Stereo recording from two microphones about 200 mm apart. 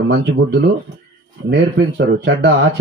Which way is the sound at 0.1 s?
60° right (ahead or behind).